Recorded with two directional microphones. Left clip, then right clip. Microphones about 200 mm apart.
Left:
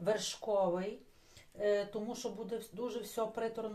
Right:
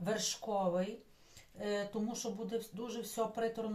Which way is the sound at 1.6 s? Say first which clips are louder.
Left 6 dB; 40° left (ahead or behind).